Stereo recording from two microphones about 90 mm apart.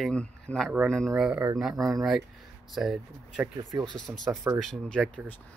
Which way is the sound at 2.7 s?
Centre (ahead or behind).